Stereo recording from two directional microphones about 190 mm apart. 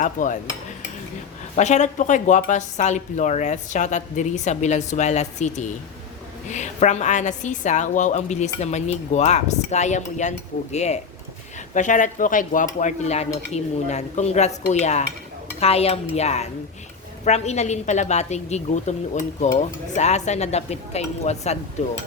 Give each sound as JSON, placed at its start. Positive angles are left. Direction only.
{"t": 0.0, "sound": "speech", "side_deg": 45}
{"t": 1.5, "sound": "a woman's voice", "side_deg": 40}